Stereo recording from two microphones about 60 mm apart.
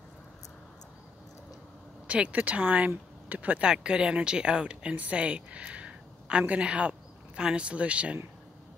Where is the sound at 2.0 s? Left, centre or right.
Right.